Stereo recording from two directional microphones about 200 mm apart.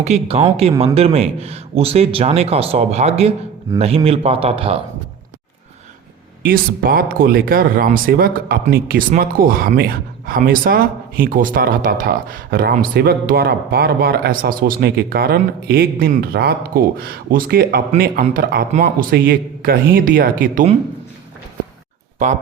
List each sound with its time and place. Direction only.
0.0 s speech: 35° right (ahead or behind)
6.4 s speech: 45° right (ahead or behind)